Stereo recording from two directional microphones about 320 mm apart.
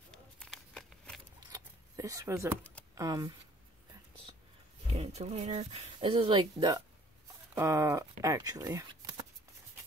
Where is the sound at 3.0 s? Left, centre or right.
Centre.